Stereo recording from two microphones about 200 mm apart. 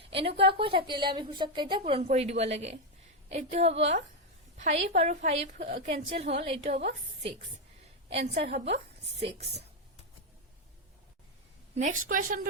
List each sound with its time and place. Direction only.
0.3 s a woman's voice: 30° right (ahead or behind)
11.7 s a woman's voice: 40° right (ahead or behind)